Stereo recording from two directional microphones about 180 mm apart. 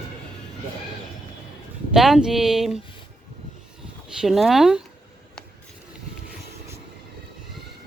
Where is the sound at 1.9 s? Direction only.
Centre (ahead or behind).